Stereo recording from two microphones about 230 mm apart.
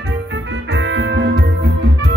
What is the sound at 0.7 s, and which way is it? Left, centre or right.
Music, right.